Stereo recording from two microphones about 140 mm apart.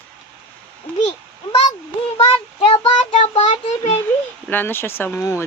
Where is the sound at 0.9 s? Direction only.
10° left (ahead or behind).